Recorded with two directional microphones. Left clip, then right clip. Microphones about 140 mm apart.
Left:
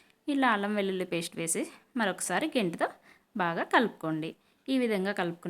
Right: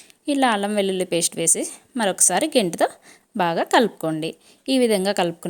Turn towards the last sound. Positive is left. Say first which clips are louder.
# right 11 dB
turn(degrees=-50)  # may be behind; listen again after turning